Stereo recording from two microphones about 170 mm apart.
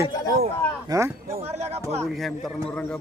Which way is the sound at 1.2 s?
35° right (ahead or behind).